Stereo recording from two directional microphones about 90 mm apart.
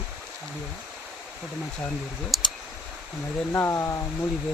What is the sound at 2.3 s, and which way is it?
Clicking, centre (ahead or behind).